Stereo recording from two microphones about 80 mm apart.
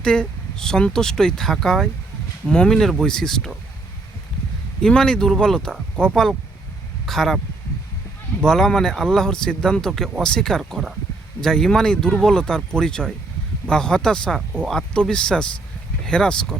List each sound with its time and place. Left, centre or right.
0.0 s speech: centre
4.8 s speech: centre
8.4 s speech: centre